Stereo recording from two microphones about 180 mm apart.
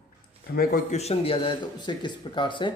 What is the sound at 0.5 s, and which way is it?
Speech, 50° left (ahead or behind).